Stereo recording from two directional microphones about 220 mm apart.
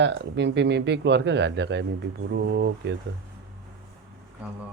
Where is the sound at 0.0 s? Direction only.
55° right (ahead or behind).